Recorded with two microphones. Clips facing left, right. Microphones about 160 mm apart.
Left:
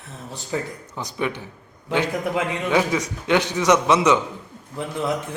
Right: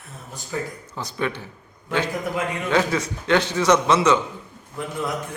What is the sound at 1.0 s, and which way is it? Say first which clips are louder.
A man's voice: even; 15° left (ahead or behind).